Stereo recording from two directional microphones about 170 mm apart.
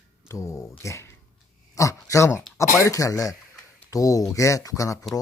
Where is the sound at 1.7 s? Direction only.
20° left (ahead or behind).